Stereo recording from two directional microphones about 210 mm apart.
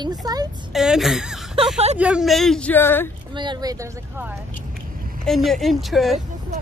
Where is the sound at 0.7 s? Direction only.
Centre (ahead or behind).